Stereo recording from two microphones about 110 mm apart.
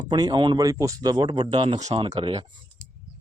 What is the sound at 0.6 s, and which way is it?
Speech, 30° right (ahead or behind).